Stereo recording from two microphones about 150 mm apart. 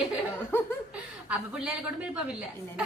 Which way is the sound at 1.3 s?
5° right (ahead or behind).